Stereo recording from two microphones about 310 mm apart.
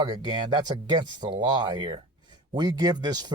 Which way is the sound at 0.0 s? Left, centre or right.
Centre.